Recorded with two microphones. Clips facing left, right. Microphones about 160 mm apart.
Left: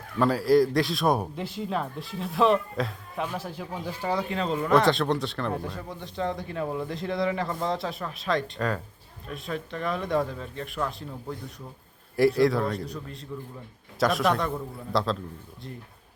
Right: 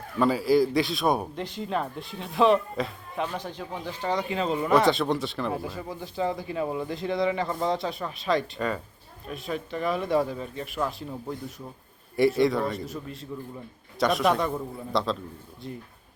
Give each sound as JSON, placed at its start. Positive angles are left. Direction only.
{"t": 0.2, "sound": "speech", "side_deg": 0}